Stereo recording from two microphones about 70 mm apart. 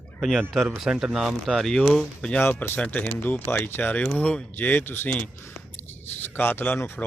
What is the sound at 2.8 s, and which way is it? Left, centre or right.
Speech, centre.